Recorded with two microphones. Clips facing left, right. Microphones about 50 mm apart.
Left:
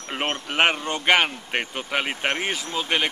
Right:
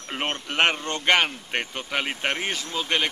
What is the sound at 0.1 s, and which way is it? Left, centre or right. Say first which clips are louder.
Speech: left 2 dB; centre.